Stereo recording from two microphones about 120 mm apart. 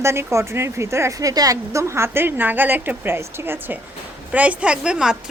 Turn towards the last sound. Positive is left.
turn(degrees=-5)  # may be behind; listen again after turning